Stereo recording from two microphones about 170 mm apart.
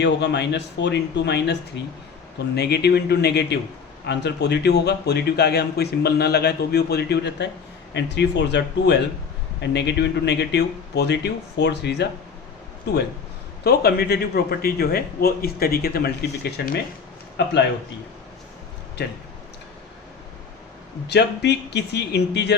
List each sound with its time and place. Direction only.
0.0 s speech: 85° left
2.6 s a man's voice: 70° left (ahead or behind)
4.0 s a man's voice: 85° left; by 16.7 s 65° left (ahead or behind)
21.1 s speech: 80° left